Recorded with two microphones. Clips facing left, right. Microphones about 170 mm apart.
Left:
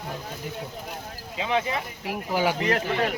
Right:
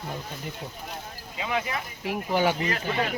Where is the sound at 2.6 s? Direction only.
60° left (ahead or behind).